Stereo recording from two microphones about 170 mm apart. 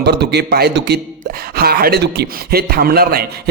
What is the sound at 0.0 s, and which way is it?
Speech, 80° right.